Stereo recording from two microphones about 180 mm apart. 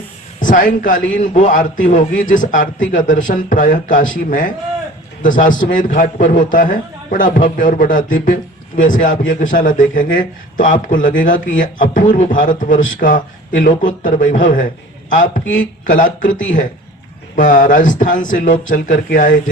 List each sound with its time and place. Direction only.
0.3 s a man's voice: 50° left (ahead or behind)
15.9 s a man's voice: 50° left (ahead or behind)
17.3 s a man's voice: 45° left (ahead or behind)